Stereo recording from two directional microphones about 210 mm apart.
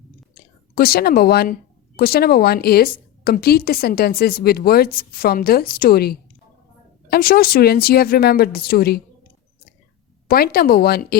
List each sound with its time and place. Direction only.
0.8 s a woman's voice: 45° left (ahead or behind)
10.2 s a woman's voice: 45° left (ahead or behind)